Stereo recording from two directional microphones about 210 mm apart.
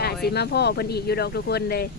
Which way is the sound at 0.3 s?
50° left (ahead or behind).